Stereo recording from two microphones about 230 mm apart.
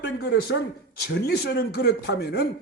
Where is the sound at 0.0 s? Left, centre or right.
Left.